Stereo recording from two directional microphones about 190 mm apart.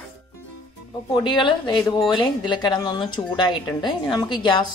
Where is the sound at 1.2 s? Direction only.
25° left (ahead or behind).